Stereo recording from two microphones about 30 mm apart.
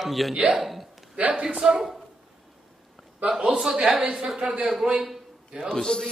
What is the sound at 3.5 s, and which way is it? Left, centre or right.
Speech, right.